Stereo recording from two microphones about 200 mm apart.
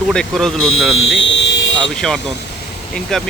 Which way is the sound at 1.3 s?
65° left (ahead or behind).